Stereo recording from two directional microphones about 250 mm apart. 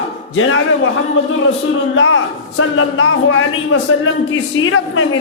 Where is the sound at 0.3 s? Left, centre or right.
Left.